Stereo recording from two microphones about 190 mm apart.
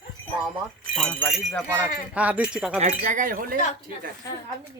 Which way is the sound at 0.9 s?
5° left (ahead or behind).